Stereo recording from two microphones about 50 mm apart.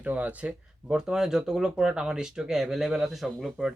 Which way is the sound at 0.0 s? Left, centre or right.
Right.